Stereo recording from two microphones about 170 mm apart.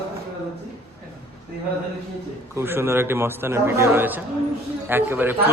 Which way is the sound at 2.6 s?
15° right (ahead or behind).